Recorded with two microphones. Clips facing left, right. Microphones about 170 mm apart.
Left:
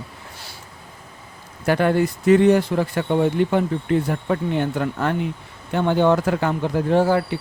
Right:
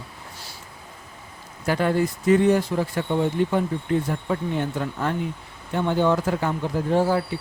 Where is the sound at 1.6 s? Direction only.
65° left (ahead or behind).